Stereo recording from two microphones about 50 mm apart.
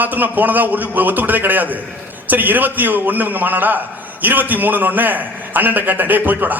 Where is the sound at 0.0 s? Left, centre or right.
Right.